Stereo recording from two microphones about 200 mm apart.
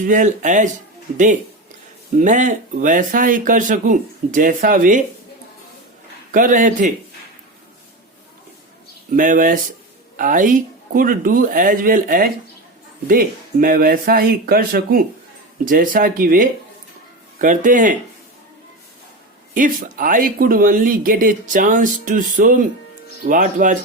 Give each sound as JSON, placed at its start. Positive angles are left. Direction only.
{"t": 0.0, "sound": "speech", "side_deg": -40}
{"t": 6.3, "sound": "speech", "side_deg": -40}
{"t": 9.1, "sound": "speech", "side_deg": -40}
{"t": 19.5, "sound": "speech", "side_deg": -45}